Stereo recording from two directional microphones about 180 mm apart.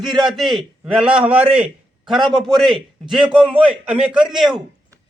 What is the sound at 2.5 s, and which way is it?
A man's voice, centre (ahead or behind).